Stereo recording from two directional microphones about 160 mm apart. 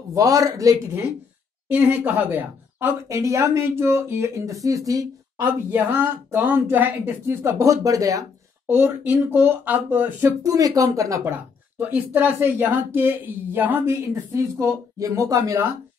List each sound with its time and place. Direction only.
0.1 s speech: 20° right (ahead or behind)
1.7 s a woman's voice: 10° right (ahead or behind)